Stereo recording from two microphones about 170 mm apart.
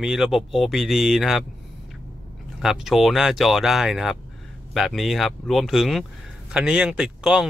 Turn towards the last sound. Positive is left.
turn(degrees=-5)  # may be behind; listen again after turning